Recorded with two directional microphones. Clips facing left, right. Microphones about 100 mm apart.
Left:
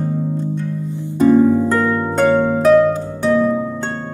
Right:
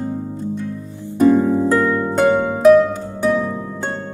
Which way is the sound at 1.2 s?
20° right (ahead or behind).